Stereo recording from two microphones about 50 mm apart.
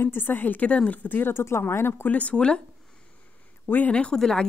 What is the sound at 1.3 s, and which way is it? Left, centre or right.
Speech, left.